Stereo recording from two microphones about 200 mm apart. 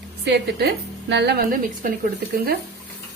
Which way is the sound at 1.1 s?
60° right (ahead or behind).